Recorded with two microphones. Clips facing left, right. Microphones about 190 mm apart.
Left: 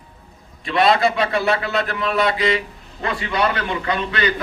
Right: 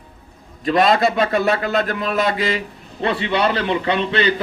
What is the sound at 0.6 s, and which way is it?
A man's voice, 45° right (ahead or behind).